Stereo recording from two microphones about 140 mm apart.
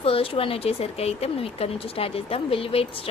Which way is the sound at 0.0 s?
40° left (ahead or behind).